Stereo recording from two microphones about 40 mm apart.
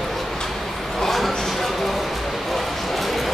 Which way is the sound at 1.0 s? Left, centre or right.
Centre.